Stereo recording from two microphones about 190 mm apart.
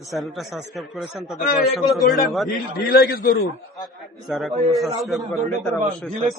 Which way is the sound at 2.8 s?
55° left (ahead or behind).